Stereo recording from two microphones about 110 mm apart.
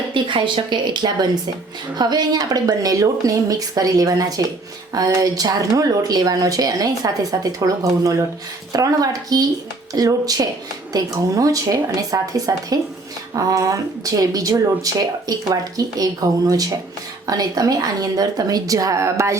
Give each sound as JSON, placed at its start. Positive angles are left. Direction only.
{"t": 0.1, "sound": "a woman's voice", "side_deg": -50}